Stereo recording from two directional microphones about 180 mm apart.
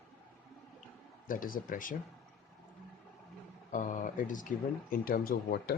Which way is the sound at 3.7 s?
45° left (ahead or behind).